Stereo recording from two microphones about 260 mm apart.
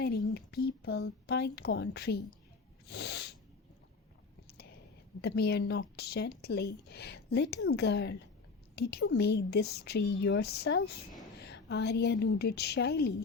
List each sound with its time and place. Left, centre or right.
0.0 s speech: left
2.8 s snort: left
5.2 s a woman's voice: left